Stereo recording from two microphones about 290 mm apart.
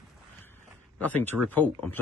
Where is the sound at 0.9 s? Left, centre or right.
Centre.